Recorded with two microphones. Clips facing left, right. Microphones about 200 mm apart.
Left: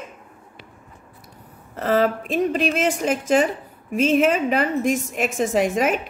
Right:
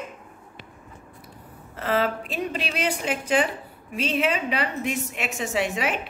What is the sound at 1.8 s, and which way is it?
A woman's voice, 40° left (ahead or behind).